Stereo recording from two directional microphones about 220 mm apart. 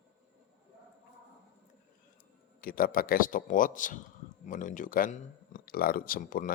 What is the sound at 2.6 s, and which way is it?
Speech, 40° left (ahead or behind).